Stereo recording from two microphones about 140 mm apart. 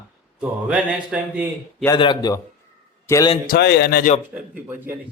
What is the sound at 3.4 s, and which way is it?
Speech, 90° left.